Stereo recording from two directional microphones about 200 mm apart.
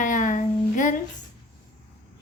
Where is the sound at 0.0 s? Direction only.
40° left (ahead or behind).